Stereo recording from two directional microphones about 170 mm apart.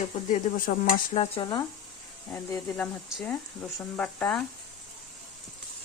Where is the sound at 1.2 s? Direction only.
30° left (ahead or behind).